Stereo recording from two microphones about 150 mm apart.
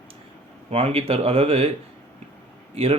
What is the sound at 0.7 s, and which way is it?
Speech, 40° right (ahead or behind).